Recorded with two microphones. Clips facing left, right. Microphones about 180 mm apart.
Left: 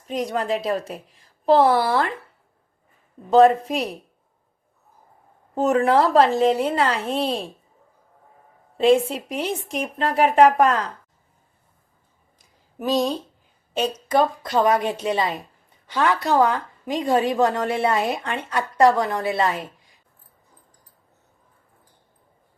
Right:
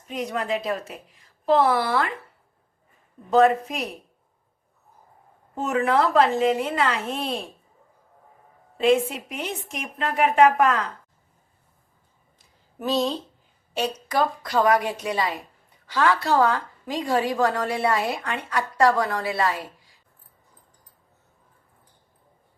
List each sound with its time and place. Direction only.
0.1 s a woman's voice: 35° left (ahead or behind)
3.2 s a woman's voice: 30° left (ahead or behind)
5.5 s a woman's voice: 35° left (ahead or behind)
8.8 s a woman's voice: 30° left (ahead or behind)
12.8 s a woman's voice: 15° left (ahead or behind)